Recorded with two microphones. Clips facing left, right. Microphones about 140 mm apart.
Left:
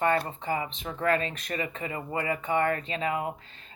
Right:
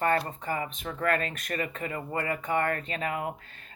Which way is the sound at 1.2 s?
45° right (ahead or behind).